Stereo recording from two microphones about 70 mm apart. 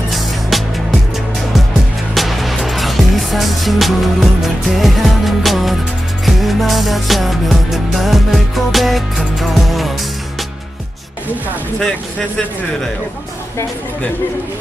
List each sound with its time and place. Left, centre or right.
0.1 s music: centre
2.1 s music: centre